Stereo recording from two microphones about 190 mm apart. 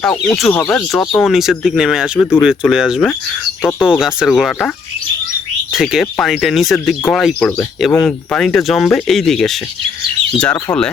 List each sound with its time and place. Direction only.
0.0 s speech: 5° left (ahead or behind)
5.7 s speech: centre (ahead or behind)